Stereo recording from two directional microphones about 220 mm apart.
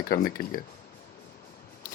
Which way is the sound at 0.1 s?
45° left (ahead or behind).